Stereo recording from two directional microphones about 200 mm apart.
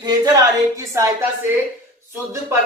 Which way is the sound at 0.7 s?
15° right (ahead or behind).